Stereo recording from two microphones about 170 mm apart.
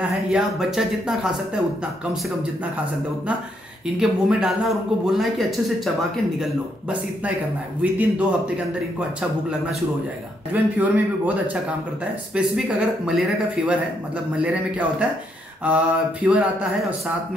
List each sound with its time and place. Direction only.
0.3 s speech: centre (ahead or behind)
3.8 s speech: 5° right (ahead or behind)
7.8 s speech: 10° right (ahead or behind)
10.5 s speech: 10° right (ahead or behind)